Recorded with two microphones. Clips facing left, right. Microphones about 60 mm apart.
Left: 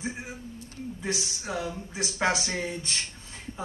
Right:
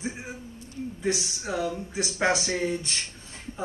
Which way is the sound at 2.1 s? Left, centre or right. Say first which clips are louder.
Right 2 dB; right.